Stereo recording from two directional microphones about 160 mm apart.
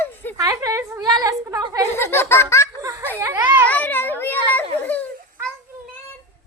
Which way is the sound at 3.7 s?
10° left (ahead or behind).